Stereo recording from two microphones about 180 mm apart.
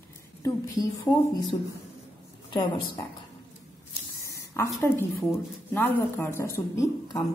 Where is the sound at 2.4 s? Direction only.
25° left (ahead or behind).